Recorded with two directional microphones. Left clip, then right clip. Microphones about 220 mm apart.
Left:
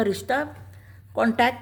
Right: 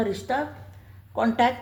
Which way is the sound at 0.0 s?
40° left (ahead or behind).